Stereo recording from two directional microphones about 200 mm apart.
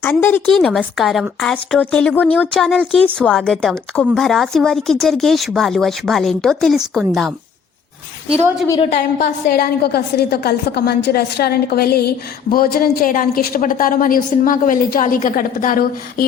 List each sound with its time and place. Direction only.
0.0 s a woman's voice: 10° left (ahead or behind)
8.9 s a woman's voice: 50° left (ahead or behind)